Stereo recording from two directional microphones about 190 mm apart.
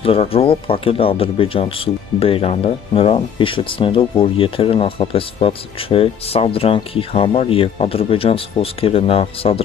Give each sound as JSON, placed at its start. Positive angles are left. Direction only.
{"t": 0.0, "sound": "speech", "side_deg": 30}